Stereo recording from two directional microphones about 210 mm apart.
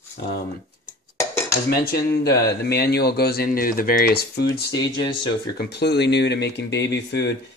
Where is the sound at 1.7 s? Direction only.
50° left (ahead or behind).